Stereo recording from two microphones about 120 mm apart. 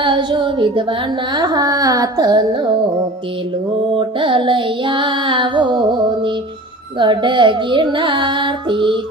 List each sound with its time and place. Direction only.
0.0 s carnatic music: 40° right (ahead or behind)
3.9 s carnatic music: 45° right (ahead or behind)
7.0 s carnatic music: 40° right (ahead or behind)